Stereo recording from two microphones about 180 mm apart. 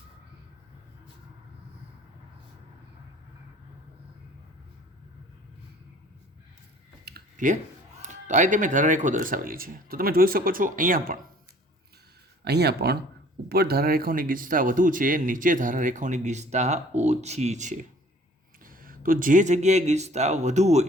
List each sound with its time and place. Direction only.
7.0 s speech: 50° right (ahead or behind)
12.5 s speech: 65° right (ahead or behind); by 17.7 s 40° right (ahead or behind)
18.6 s speech: 50° right (ahead or behind)